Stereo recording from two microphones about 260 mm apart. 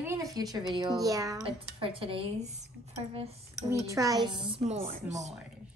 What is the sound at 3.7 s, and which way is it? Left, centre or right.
Speech, centre.